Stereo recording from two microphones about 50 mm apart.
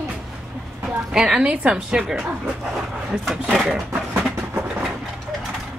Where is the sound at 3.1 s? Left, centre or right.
Centre.